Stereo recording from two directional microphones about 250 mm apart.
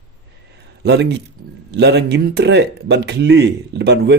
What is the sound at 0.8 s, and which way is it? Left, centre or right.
Speech, right.